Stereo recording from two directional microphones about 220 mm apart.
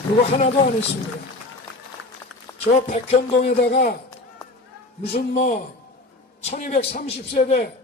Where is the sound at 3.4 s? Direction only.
45° left (ahead or behind).